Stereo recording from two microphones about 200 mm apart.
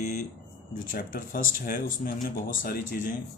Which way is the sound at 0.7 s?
45° left (ahead or behind).